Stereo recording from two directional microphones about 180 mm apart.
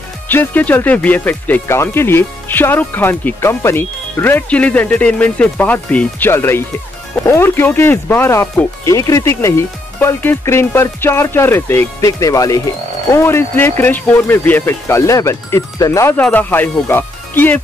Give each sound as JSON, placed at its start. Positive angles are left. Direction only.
{"t": 0.3, "sound": "speech", "side_deg": 10}